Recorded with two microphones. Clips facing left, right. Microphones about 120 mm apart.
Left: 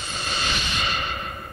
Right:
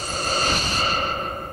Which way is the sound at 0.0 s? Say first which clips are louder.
Right 5 dB; 40° right (ahead or behind).